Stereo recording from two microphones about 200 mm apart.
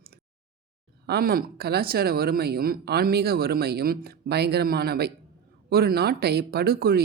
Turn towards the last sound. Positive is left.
turn(degrees=-50)  # may be behind; listen again after turning